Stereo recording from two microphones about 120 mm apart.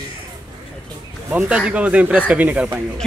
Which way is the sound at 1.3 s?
10° right (ahead or behind).